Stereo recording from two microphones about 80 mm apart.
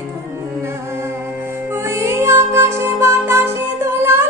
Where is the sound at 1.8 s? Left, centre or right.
Right.